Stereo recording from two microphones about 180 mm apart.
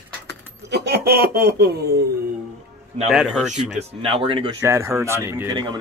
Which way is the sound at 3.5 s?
40° right (ahead or behind).